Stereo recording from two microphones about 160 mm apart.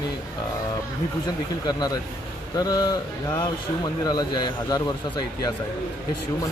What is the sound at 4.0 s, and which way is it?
Speech, 25° left (ahead or behind).